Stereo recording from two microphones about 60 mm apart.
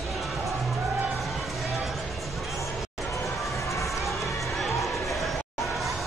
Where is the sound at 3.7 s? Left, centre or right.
Left.